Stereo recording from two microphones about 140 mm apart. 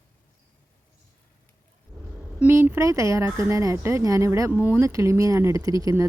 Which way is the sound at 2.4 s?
15° right (ahead or behind).